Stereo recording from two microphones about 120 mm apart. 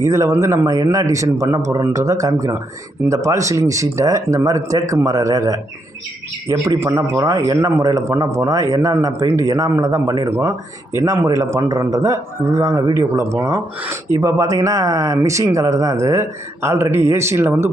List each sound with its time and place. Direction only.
0.0 s a man's voice: 25° right (ahead or behind)
6.7 s a man's voice: 25° right (ahead or behind)